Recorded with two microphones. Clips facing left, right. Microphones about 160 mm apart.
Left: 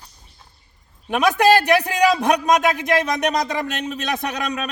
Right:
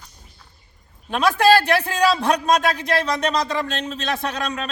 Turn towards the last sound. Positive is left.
turn(degrees=15)  # may be behind; listen again after turning